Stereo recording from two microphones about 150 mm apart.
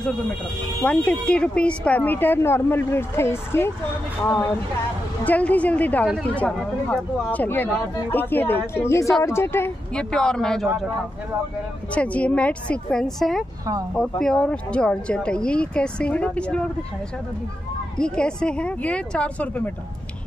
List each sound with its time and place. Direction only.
0.8 s a woman's voice: 5° left (ahead or behind)
10.1 s speech: 5° left (ahead or behind)
11.9 s a woman's voice: 10° left (ahead or behind)
17.9 s a woman's voice: 5° left (ahead or behind)